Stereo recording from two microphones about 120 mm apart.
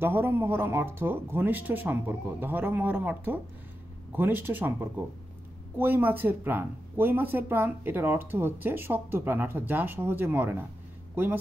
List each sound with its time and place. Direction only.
0.0 s speech: 20° right (ahead or behind)